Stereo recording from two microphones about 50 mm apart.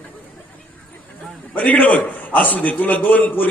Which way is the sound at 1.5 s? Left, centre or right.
Left.